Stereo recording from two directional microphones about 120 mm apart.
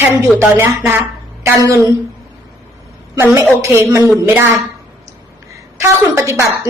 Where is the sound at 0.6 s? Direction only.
25° right (ahead or behind).